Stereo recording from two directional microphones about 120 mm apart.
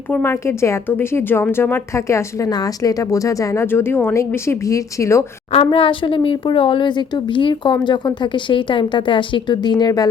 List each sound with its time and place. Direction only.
0.1 s a woman's voice: 20° left (ahead or behind)
5.5 s a woman's voice: 50° left (ahead or behind); by 10.1 s 35° left (ahead or behind)